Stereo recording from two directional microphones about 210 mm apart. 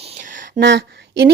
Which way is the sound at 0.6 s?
55° right (ahead or behind).